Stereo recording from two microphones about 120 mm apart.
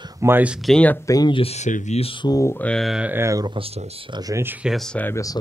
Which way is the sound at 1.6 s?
70° left (ahead or behind).